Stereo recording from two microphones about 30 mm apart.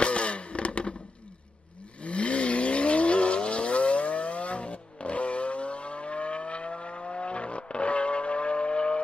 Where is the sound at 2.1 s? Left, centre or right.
Left.